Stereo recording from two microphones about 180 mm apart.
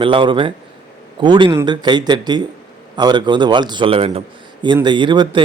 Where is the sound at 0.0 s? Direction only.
30° right (ahead or behind).